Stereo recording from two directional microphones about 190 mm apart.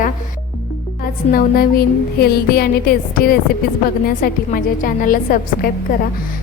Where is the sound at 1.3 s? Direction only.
50° left (ahead or behind).